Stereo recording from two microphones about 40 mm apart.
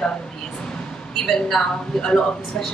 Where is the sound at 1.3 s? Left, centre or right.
Centre.